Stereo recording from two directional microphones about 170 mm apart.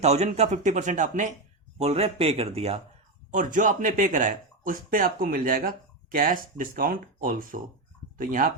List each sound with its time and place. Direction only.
0.0 s speech: 40° right (ahead or behind)
3.3 s speech: 50° right (ahead or behind)